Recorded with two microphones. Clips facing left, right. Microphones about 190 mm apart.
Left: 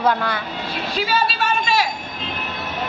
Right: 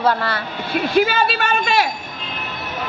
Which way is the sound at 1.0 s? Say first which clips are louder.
Right 4 dB; 60° right (ahead or behind).